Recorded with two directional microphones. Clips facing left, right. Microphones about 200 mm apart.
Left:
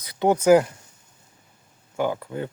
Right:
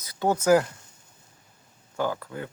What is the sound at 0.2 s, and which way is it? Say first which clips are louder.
Speech: left 4 dB; 15° left (ahead or behind).